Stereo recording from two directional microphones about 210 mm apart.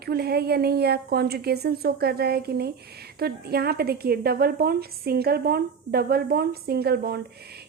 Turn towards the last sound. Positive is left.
turn(degrees=-45)  # may be behind; listen again after turning